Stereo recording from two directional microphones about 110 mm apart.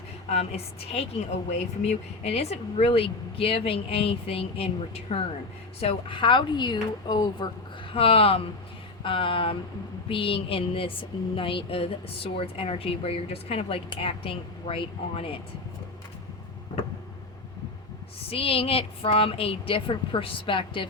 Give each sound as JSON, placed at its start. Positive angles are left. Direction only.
{"t": 0.3, "sound": "a woman's voice", "side_deg": 70}
{"t": 1.5, "sound": "a woman's voice", "side_deg": 80}
{"t": 7.9, "sound": "a woman's voice", "side_deg": 60}
{"t": 18.3, "sound": "speech", "side_deg": 60}